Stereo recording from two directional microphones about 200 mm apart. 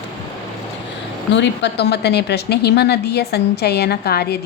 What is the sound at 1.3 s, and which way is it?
A woman's voice, 60° left (ahead or behind).